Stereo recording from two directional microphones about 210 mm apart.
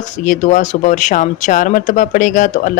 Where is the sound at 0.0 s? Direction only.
35° left (ahead or behind).